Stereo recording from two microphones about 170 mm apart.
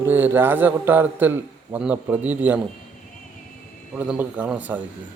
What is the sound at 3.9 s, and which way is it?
Speech, 10° right (ahead or behind).